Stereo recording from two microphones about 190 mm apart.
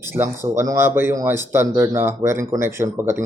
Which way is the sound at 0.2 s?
15° right (ahead or behind).